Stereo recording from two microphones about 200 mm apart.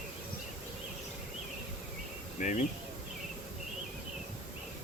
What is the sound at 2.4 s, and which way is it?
Speech, 40° left (ahead or behind).